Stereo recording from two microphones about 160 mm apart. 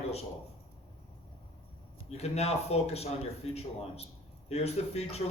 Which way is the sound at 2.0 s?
40° left (ahead or behind).